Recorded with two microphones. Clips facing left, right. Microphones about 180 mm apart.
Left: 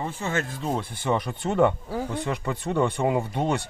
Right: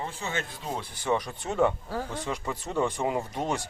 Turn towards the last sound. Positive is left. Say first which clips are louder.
# left 4 dB
turn(degrees=60)  # may be behind; listen again after turning